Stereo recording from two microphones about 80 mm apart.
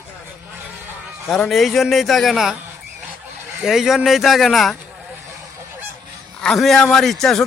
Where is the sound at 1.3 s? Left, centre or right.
Centre.